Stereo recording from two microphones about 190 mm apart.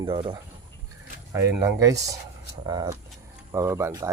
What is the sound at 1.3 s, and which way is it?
Speech, 15° right (ahead or behind).